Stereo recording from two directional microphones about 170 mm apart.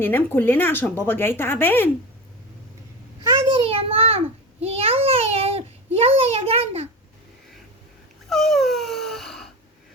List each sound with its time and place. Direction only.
0.0 s speech: 10° left (ahead or behind)
3.5 s child singing: 35° right (ahead or behind)
4.6 s a sound: 35° right (ahead or behind)
8.3 s dog: centre (ahead or behind)